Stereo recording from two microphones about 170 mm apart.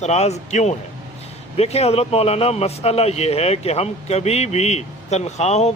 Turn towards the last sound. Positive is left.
turn(degrees=40)  # may be behind; listen again after turning